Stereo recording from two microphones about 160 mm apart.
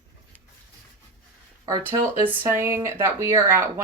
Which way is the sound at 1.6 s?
20° right (ahead or behind).